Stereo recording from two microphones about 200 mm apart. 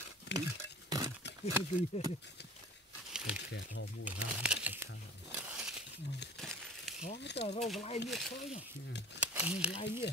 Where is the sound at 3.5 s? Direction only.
60° left (ahead or behind).